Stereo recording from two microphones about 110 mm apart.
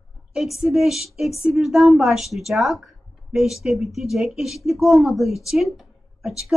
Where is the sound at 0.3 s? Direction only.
5° right (ahead or behind).